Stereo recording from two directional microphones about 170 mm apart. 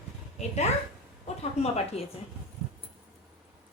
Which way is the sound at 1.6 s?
35° left (ahead or behind).